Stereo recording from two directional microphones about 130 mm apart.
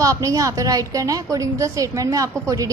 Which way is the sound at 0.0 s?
25° right (ahead or behind).